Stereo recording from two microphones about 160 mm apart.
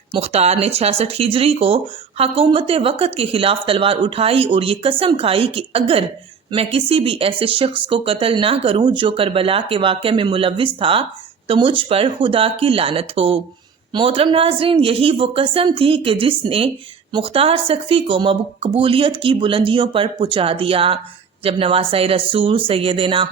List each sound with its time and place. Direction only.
0.1 s speech: 40° right (ahead or behind)